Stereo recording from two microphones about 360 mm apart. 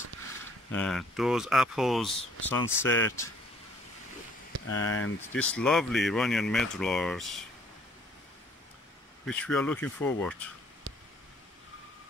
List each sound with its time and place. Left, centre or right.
0.7 s speech: centre
4.6 s speech: left
5.3 s speech: centre
9.2 s speech: centre